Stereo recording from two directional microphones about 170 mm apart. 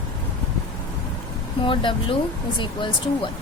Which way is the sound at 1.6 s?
30° left (ahead or behind).